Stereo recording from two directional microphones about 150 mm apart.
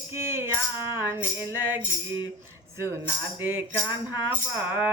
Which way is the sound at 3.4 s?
10° right (ahead or behind).